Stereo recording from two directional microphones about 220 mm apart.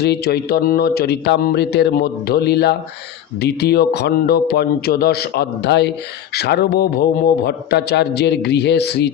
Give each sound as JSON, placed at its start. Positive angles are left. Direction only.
{"t": 0.0, "sound": "a man's voice", "side_deg": 45}